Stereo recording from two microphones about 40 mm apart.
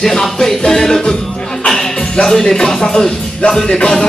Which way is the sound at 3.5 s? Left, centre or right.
Centre.